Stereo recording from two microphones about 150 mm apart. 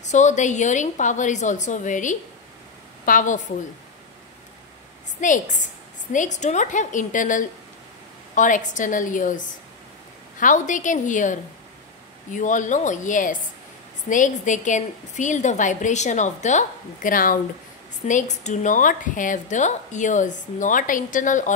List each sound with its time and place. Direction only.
0.0 s a woman's voice: 50° left (ahead or behind)
5.2 s a woman's voice: 60° left (ahead or behind)
10.4 s a woman's voice: 55° left (ahead or behind)
18.0 s a woman's voice: 55° left (ahead or behind)